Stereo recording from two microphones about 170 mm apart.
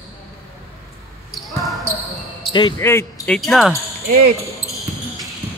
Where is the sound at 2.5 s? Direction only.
25° left (ahead or behind).